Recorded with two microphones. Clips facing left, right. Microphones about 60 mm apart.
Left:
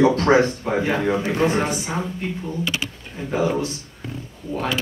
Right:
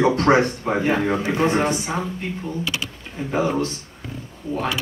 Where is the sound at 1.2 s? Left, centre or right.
Right.